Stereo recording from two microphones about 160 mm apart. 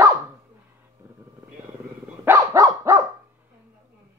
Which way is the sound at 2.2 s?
20° right (ahead or behind).